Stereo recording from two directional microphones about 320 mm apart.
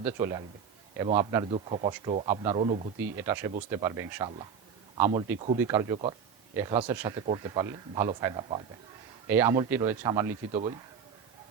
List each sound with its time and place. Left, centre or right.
0.0 s speech: centre